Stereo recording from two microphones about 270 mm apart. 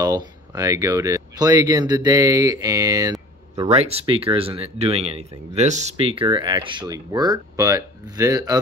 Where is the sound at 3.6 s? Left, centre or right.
Right.